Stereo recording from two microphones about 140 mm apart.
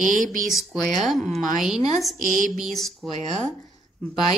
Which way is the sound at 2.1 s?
75° right (ahead or behind).